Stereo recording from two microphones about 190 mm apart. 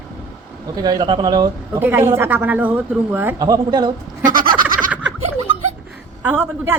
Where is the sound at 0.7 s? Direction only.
20° right (ahead or behind).